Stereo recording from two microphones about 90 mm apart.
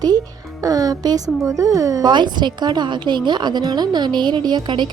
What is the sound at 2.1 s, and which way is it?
A woman's voice, 55° right (ahead or behind).